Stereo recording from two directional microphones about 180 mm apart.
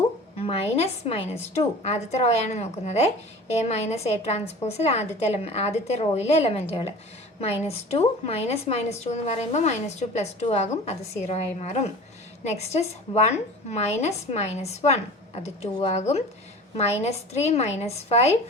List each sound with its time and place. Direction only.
0.4 s a woman's voice: 35° left (ahead or behind)